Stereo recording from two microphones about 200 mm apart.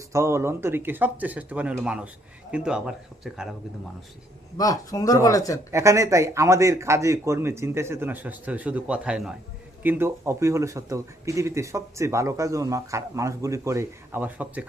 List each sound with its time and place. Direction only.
0.1 s speech: 15° right (ahead or behind)
4.5 s speech: 20° left (ahead or behind)
5.7 s speech: 15° right (ahead or behind)